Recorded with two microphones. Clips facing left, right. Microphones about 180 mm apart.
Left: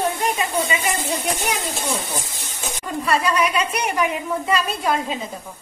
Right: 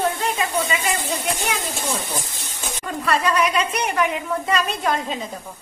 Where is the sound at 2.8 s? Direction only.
10° left (ahead or behind).